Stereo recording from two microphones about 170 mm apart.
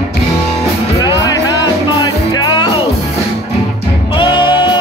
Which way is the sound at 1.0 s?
25° left (ahead or behind).